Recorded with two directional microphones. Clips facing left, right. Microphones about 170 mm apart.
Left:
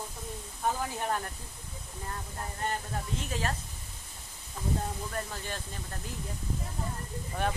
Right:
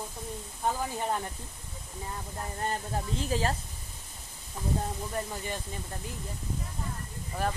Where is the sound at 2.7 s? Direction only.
30° right (ahead or behind).